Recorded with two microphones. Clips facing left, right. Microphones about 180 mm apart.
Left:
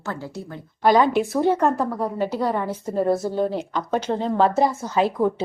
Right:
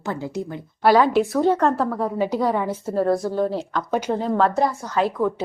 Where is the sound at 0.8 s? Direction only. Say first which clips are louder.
Right 1 dB; 5° right (ahead or behind).